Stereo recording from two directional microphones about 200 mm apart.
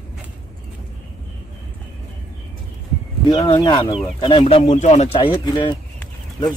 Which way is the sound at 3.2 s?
25° left (ahead or behind).